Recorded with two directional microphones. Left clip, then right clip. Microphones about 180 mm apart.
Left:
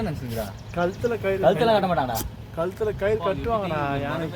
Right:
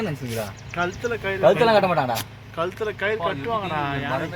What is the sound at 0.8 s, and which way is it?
Speech, 45° left (ahead or behind).